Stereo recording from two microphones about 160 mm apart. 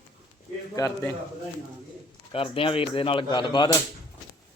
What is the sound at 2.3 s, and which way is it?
Speech, 35° left (ahead or behind).